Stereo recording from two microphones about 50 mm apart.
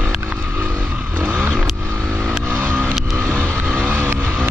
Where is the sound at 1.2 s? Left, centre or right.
Right.